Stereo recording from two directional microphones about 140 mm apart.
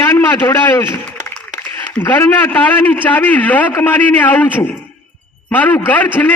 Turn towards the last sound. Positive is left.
turn(degrees=15)  # may be behind; listen again after turning